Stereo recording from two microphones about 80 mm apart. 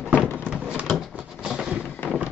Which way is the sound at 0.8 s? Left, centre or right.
Centre.